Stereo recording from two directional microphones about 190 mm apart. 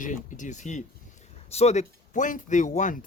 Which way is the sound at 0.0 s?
45° left (ahead or behind).